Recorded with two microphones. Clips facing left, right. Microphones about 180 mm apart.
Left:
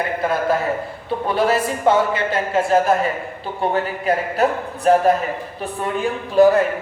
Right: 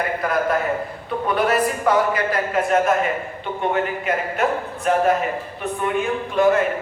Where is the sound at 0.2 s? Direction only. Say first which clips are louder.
Left 2 dB; 30° left (ahead or behind).